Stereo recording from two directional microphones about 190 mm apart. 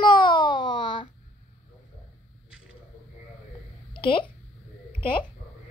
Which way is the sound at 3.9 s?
25° left (ahead or behind).